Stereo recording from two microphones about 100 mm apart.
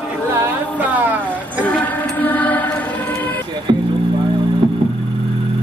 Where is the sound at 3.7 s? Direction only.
50° right (ahead or behind).